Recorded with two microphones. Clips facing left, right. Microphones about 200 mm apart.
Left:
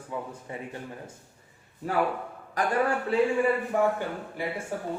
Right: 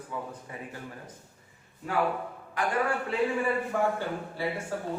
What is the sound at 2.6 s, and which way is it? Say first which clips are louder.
Speech: left 2 dB; 40° left (ahead or behind).